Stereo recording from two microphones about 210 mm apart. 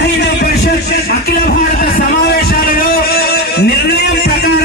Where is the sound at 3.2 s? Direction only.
50° left (ahead or behind).